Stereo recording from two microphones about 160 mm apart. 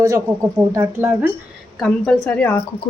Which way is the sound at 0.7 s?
15° right (ahead or behind).